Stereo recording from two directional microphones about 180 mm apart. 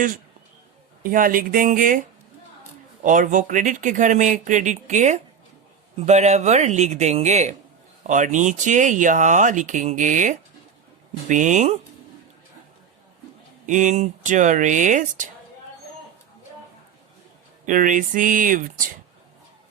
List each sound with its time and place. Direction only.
1.0 s speech: 50° right (ahead or behind)
13.7 s speech: 45° right (ahead or behind)
17.7 s speech: 45° right (ahead or behind)